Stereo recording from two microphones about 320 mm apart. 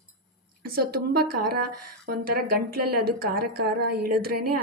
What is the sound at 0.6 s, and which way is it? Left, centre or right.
A woman's voice, right.